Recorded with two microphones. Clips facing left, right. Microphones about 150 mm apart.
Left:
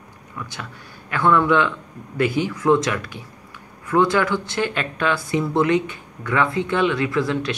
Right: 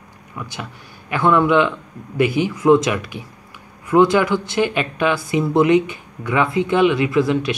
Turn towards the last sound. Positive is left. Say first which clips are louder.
# right 4 dB
turn(degrees=-10)  # may be behind; listen again after turning